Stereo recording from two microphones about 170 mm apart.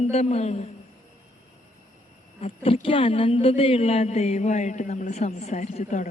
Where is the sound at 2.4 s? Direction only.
35° left (ahead or behind).